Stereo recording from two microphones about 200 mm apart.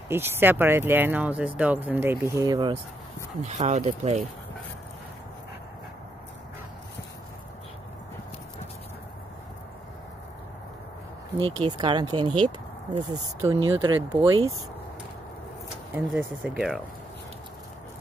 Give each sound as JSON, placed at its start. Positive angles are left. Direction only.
{"t": 0.1, "sound": "speech", "side_deg": -10}
{"t": 3.4, "sound": "speech", "side_deg": -35}
{"t": 11.3, "sound": "speech", "side_deg": -25}
{"t": 15.9, "sound": "speech", "side_deg": -10}